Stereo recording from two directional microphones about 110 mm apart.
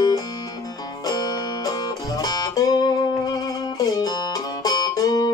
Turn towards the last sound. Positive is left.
turn(degrees=35)  # may be behind; listen again after turning